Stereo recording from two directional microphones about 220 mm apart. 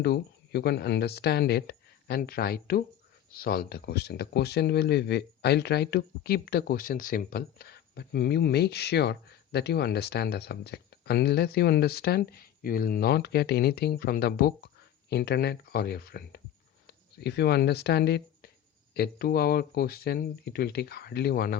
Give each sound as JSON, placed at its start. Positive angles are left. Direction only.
{"t": 0.0, "sound": "speech", "side_deg": 45}